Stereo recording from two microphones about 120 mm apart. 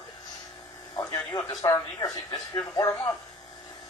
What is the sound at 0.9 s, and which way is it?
Speech, 30° left (ahead or behind).